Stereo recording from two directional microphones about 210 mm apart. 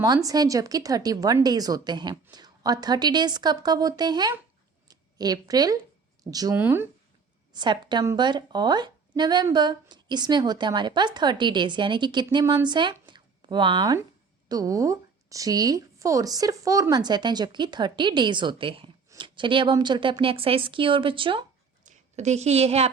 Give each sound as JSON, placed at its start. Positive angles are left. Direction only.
{"t": 0.0, "sound": "a woman's voice", "side_deg": -15}